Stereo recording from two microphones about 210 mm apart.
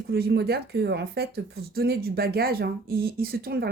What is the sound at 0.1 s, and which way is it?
Speech, 50° right (ahead or behind).